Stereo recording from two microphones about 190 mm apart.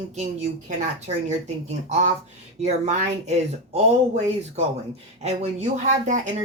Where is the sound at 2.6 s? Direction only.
35° right (ahead or behind).